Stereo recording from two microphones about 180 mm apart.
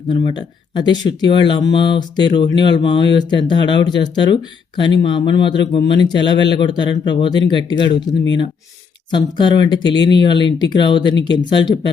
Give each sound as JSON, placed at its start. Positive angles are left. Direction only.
{"t": 0.1, "sound": "speech", "side_deg": 25}